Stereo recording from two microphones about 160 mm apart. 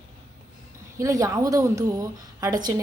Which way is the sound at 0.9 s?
20° right (ahead or behind).